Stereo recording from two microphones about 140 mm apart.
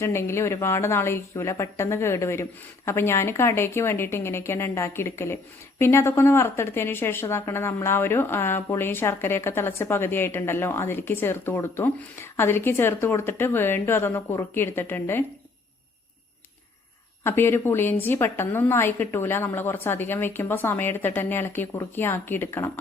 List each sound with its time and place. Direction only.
0.0 s a woman's voice: 20° left (ahead or behind)
17.2 s speech: 15° left (ahead or behind)